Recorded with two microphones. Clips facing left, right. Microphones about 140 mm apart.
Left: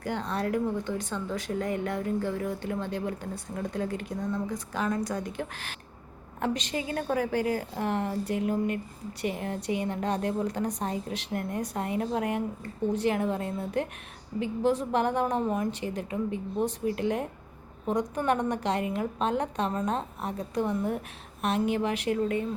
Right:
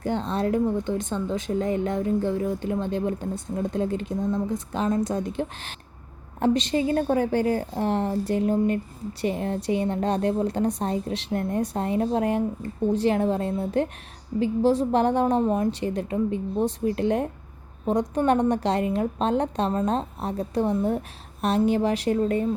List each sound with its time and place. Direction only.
0.0 s a woman's voice: 25° right (ahead or behind)